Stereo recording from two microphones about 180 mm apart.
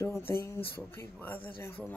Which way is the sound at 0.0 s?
15° left (ahead or behind).